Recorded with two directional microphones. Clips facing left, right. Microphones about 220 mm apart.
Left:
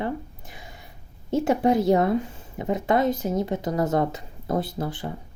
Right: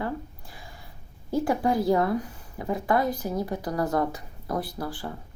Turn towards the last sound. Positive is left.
turn(degrees=20)  # may be behind; listen again after turning